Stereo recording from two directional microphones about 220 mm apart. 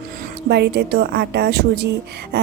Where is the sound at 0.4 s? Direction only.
50° right (ahead or behind).